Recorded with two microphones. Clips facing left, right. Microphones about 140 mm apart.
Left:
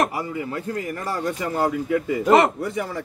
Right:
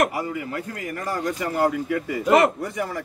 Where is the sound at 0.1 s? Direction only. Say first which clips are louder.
Even; 30° left (ahead or behind).